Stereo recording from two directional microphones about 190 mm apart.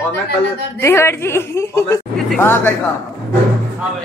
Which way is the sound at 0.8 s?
15° left (ahead or behind).